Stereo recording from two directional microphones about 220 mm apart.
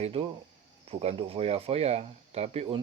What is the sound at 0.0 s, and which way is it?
Speech, 25° right (ahead or behind).